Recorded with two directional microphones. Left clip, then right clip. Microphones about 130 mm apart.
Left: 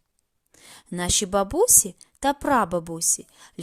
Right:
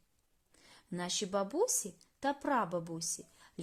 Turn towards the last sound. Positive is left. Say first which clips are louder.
# left 13 dB
turn(degrees=50)  # may be behind; listen again after turning